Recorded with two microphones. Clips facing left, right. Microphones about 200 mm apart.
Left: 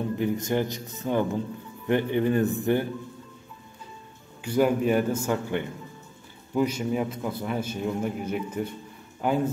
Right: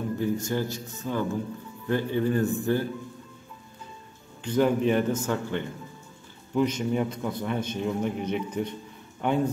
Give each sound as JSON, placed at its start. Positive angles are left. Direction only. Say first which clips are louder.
{"t": 0.2, "sound": "speech", "louder": "left 2 dB", "side_deg": 20}
{"t": 4.4, "sound": "a man's voice", "louder": "even", "side_deg": 10}